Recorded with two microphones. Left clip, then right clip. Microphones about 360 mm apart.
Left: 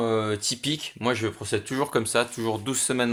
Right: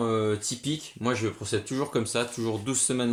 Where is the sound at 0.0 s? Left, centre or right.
Left.